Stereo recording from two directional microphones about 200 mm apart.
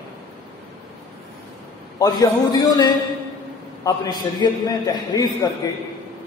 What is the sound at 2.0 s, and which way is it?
A man's voice, 20° left (ahead or behind).